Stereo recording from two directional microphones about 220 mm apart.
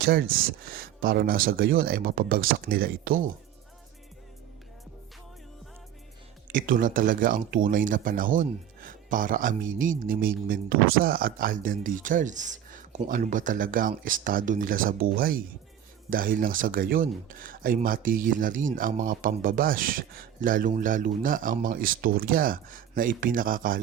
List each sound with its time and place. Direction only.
0.0 s speech: 40° right (ahead or behind)
6.5 s speech: 40° right (ahead or behind)